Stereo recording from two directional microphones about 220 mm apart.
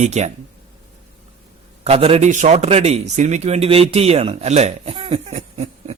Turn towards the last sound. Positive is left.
turn(degrees=-30)  # may be behind; listen again after turning